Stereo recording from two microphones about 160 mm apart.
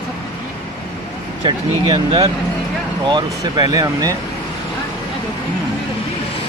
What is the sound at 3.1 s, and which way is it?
Speech, 25° right (ahead or behind).